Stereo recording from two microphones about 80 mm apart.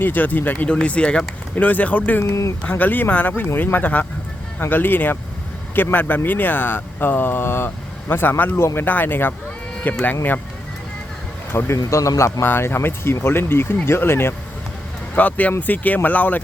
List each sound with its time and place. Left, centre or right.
0.0 s speech: left
11.5 s speech: left
15.1 s speech: centre